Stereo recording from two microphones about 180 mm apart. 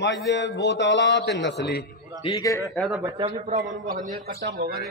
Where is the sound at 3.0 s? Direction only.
25° right (ahead or behind).